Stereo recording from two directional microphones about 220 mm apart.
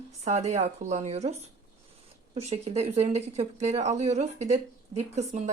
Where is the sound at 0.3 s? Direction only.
35° right (ahead or behind).